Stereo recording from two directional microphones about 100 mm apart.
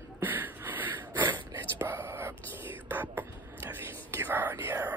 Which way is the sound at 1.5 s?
25° right (ahead or behind).